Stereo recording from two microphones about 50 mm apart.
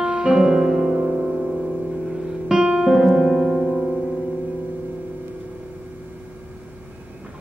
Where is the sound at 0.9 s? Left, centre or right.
Right.